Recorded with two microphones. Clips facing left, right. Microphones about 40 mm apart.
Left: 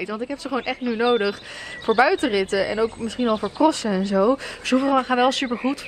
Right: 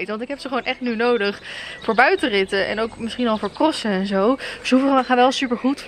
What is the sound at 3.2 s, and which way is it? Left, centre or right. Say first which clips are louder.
Speech: even; right.